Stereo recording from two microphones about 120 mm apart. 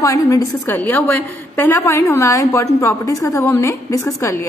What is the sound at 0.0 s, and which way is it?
Speech, 25° left (ahead or behind).